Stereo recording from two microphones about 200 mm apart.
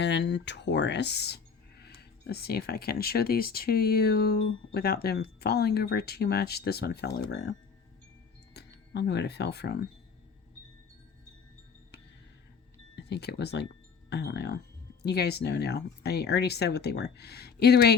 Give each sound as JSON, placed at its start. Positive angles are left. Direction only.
{"t": 0.0, "sound": "speech", "side_deg": 60}
{"t": 8.5, "sound": "speech", "side_deg": 55}
{"t": 13.0, "sound": "speech", "side_deg": 55}